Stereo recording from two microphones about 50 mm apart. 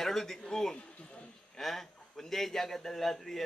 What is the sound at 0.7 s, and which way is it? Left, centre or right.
Speech, left.